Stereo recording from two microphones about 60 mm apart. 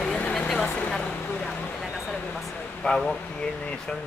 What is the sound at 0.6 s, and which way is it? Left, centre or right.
Speech, left.